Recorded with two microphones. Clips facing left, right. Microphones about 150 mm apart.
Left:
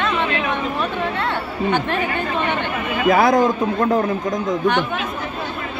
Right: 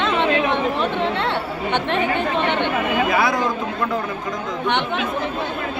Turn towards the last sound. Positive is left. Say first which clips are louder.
# left 5 dB
turn(degrees=45)  # may be behind; listen again after turning